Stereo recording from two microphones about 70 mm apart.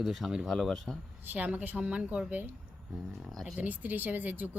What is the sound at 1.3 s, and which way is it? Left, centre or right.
Speech, right.